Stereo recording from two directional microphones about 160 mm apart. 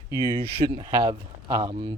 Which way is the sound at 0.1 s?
15° right (ahead or behind).